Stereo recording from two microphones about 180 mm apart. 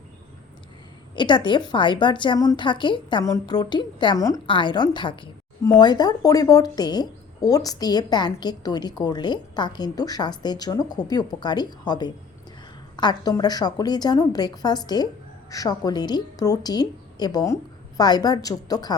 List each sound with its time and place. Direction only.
1.1 s a woman's voice: 25° left (ahead or behind)